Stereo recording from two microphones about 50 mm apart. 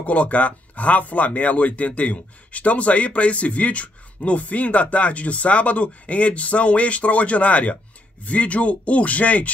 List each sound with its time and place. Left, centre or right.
0.0 s speech: left